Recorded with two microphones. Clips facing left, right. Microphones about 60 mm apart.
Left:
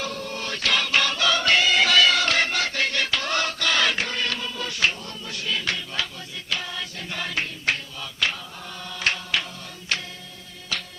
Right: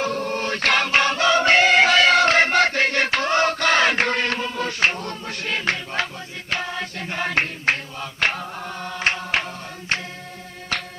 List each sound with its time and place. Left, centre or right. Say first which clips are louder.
0.0 s music: right 7 dB; right
4.0 s a sound: right 6 dB; right
6.5 s chant: right 4 dB; right
9.9 s music: right 3 dB; right
10.7 s music: right 4 dB; right